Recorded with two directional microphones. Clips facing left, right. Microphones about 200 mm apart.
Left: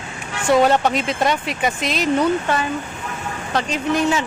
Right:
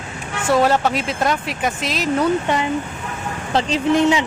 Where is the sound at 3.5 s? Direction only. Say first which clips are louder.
Right 4 dB; 30° right (ahead or behind).